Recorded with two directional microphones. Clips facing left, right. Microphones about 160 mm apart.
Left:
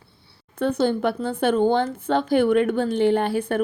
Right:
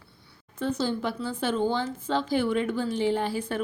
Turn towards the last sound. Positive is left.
turn(degrees=60)  # may be behind; listen again after turning